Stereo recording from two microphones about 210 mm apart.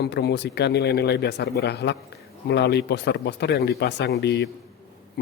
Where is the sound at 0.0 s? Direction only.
50° left (ahead or behind).